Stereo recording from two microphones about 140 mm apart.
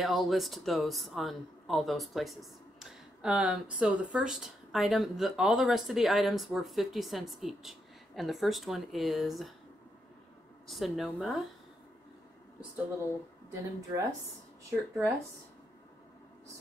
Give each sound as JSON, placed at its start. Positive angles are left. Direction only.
{"t": 0.0, "sound": "speech", "side_deg": 0}
{"t": 10.7, "sound": "speech", "side_deg": 0}
{"t": 13.5, "sound": "speech", "side_deg": -25}